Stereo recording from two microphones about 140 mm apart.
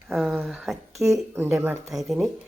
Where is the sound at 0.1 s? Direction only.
Centre (ahead or behind).